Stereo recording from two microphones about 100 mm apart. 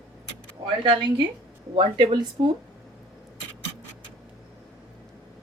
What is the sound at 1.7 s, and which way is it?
Speech, 60° right (ahead or behind).